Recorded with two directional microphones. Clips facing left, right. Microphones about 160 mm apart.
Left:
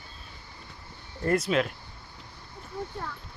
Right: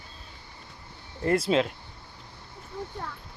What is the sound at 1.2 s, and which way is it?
Speech, 30° right (ahead or behind).